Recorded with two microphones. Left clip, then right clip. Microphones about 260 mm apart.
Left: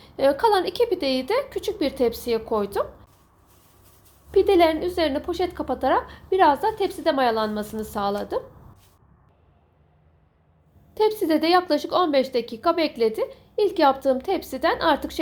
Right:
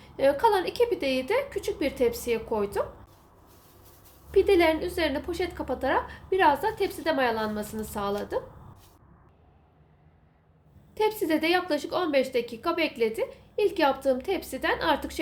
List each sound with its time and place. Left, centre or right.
0.0 s speech: centre
4.3 s speech: centre
10.9 s a woman's voice: centre